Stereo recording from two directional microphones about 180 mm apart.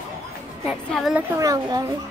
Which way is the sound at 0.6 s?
5° right (ahead or behind).